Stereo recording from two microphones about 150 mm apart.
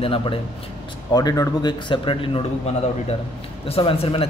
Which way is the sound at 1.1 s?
25° left (ahead or behind).